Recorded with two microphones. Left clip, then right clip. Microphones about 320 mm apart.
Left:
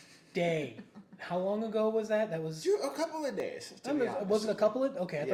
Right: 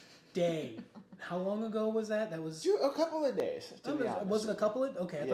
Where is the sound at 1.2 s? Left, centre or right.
Left.